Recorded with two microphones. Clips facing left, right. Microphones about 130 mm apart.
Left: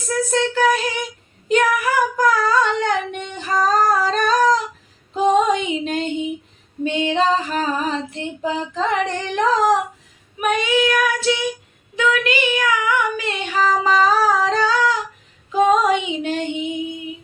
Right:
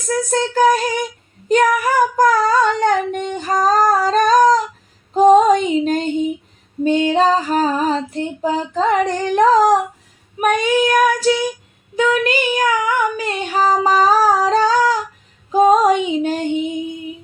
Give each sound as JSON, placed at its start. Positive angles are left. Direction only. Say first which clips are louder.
{"t": 0.3, "sound": "child singing", "louder": "right 4 dB", "side_deg": -40}
{"t": 1.5, "sound": "female singing", "louder": "right 3 dB", "side_deg": -40}
{"t": 4.0, "sound": "humming", "louder": "right 5 dB", "side_deg": -40}
{"t": 5.1, "sound": "female singing", "louder": "right 6 dB", "side_deg": -40}
{"t": 10.4, "sound": "child singing", "louder": "right 3 dB", "side_deg": -45}
{"t": 15.5, "sound": "female singing", "louder": "right 4 dB", "side_deg": -40}